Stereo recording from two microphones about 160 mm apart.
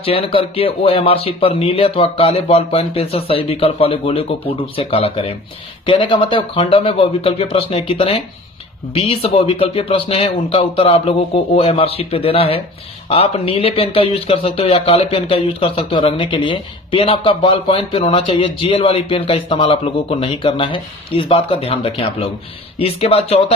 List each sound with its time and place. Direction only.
0.0 s speech: 35° left (ahead or behind)